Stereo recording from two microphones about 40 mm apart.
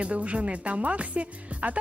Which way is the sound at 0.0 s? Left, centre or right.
Right.